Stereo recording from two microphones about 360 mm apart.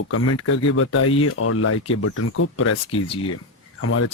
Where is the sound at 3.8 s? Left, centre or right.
Left.